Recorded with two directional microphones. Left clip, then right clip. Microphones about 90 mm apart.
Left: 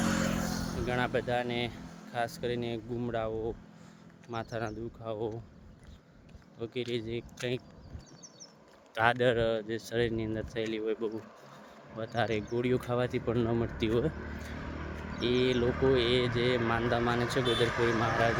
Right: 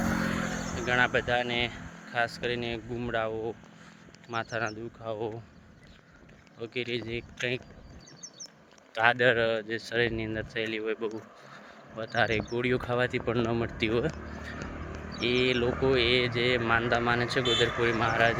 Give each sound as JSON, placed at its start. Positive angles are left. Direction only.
{"t": 0.0, "sound": "vehicle", "side_deg": -90}
{"t": 0.9, "sound": "speech", "side_deg": 40}
{"t": 6.6, "sound": "speech", "side_deg": 45}
{"t": 9.0, "sound": "speech", "side_deg": 45}
{"t": 14.8, "sound": "vehicle", "side_deg": 20}
{"t": 15.2, "sound": "speech", "side_deg": 45}